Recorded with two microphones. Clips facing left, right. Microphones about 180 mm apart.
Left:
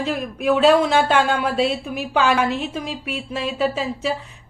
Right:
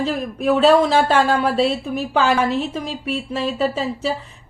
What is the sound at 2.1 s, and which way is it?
Speech, 30° right (ahead or behind).